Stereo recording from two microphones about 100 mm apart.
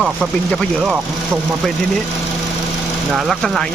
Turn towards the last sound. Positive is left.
turn(degrees=0)  # may be behind; listen again after turning